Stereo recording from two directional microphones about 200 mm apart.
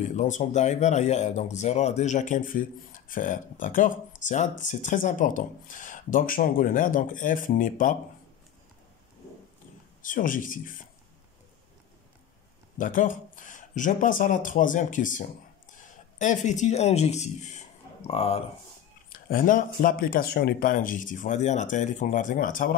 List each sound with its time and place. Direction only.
0.0 s speech: 40° left (ahead or behind)
10.0 s a man's voice: 40° left (ahead or behind)
12.7 s speech: 40° left (ahead or behind)
19.2 s speech: 45° left (ahead or behind)